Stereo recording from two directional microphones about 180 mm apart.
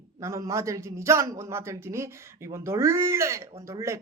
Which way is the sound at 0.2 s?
15° right (ahead or behind).